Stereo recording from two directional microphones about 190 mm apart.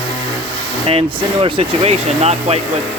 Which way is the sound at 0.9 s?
30° right (ahead or behind).